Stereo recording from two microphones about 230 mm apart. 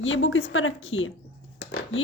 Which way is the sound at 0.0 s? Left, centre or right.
Left.